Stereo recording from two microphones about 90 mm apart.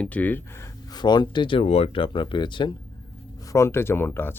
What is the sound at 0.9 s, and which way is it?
Speech, 55° left (ahead or behind).